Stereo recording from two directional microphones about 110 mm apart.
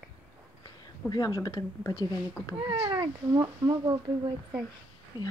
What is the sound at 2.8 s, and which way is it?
Speech, 40° right (ahead or behind).